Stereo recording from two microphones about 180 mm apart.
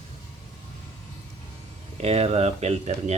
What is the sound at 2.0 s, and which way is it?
A man's voice, 35° right (ahead or behind).